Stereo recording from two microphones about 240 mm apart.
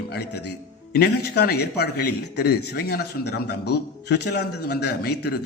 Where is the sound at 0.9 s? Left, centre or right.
Left.